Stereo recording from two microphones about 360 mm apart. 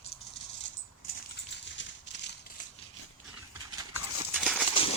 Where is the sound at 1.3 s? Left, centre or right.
Left.